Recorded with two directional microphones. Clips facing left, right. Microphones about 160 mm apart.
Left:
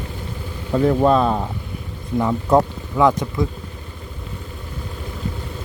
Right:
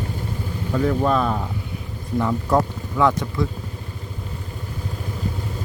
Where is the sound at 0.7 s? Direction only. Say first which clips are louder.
Left 4 dB; 30° left (ahead or behind).